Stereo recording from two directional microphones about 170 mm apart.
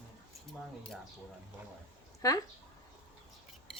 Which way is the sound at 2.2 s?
20° left (ahead or behind).